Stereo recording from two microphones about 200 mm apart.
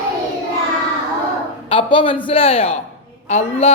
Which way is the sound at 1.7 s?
25° left (ahead or behind).